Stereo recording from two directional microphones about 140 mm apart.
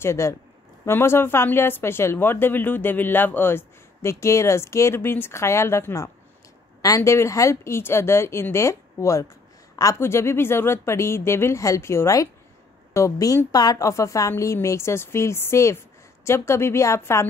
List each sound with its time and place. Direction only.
0.0 s a woman's voice: 20° left (ahead or behind)